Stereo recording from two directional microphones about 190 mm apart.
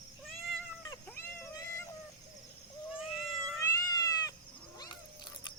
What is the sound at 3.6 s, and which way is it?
Cat, 15° left (ahead or behind).